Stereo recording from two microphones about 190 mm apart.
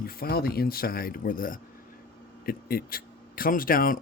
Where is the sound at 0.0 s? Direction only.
50° left (ahead or behind).